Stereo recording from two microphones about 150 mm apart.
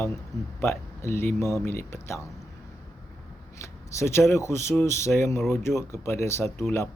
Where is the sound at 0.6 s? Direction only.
15° left (ahead or behind).